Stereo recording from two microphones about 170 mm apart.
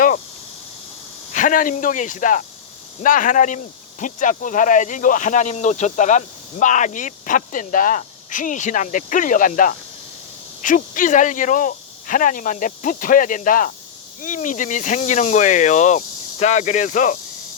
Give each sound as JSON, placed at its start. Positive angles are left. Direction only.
{"t": 1.3, "sound": "speech", "side_deg": 50}